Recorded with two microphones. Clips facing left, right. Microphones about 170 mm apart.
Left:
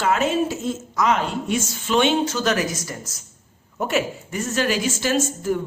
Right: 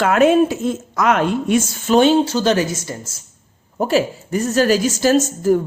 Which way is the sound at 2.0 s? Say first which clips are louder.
Right 6 dB; 35° right (ahead or behind).